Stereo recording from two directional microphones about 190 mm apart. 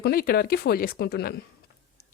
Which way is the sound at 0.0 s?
55° left (ahead or behind).